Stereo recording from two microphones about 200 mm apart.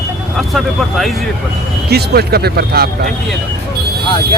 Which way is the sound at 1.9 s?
55° right (ahead or behind).